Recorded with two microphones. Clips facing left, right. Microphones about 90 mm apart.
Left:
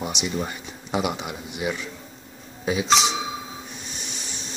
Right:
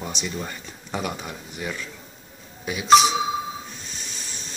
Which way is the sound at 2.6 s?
25° left (ahead or behind).